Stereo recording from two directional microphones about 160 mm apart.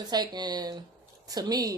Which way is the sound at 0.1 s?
25° right (ahead or behind).